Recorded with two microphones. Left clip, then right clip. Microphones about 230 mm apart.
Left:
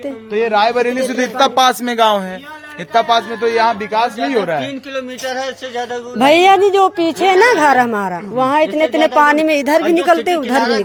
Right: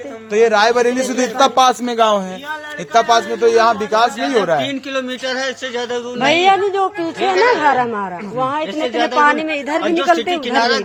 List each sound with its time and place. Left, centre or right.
0.3 s a man's voice: right
0.9 s a man's voice: centre
2.9 s a man's voice: centre
4.6 s a man's voice: centre
6.1 s a woman's voice: left
10.6 s a man's voice: centre